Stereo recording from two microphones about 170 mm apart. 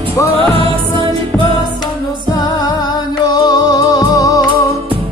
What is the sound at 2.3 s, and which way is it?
Music, 25° left (ahead or behind).